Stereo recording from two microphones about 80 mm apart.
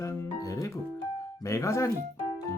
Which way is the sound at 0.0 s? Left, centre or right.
Left.